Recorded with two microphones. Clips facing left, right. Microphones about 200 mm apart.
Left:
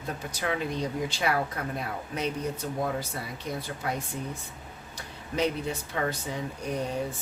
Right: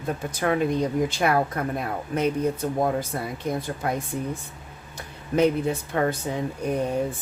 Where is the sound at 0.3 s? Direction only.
50° right (ahead or behind).